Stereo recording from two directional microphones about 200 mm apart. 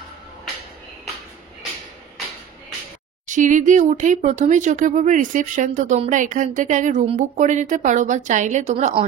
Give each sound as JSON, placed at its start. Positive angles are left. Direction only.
{"t": 3.3, "sound": "speech", "side_deg": -40}